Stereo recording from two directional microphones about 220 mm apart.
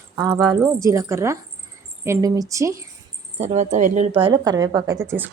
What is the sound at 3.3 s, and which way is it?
Speech, 30° right (ahead or behind).